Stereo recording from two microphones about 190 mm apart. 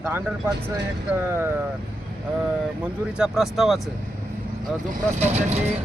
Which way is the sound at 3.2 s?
Centre (ahead or behind).